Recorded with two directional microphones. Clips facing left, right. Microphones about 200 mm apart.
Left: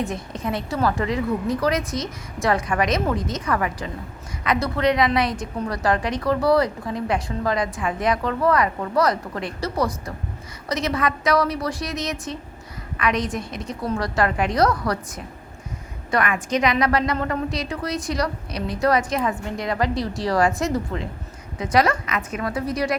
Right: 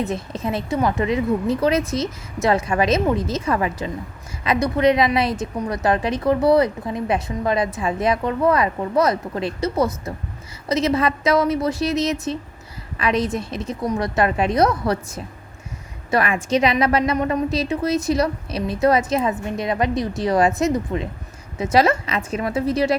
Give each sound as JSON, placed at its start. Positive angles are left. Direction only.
{"t": 0.0, "sound": "a woman's voice", "side_deg": -20}